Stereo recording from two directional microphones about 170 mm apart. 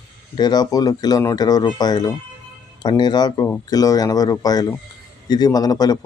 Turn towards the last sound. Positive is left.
turn(degrees=25)  # may be behind; listen again after turning